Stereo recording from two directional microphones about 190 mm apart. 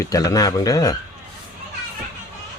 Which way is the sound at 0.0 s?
15° left (ahead or behind).